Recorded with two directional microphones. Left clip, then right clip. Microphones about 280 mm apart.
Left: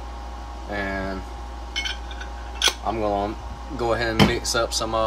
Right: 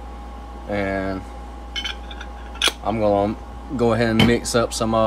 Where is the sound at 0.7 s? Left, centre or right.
Right.